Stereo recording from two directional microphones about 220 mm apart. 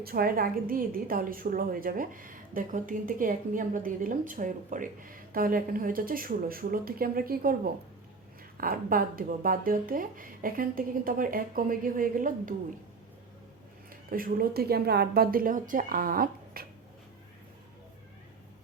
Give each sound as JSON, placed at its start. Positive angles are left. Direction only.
{"t": 0.0, "sound": "a woman's voice", "side_deg": -45}
{"t": 13.9, "sound": "a woman's voice", "side_deg": -40}